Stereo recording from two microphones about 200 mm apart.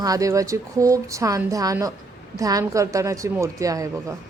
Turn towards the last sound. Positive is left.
turn(degrees=-15)  # may be behind; listen again after turning